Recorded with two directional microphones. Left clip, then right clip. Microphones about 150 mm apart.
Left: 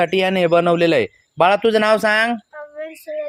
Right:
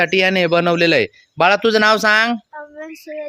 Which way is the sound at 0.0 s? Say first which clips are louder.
Right 2 dB; 20° right (ahead or behind).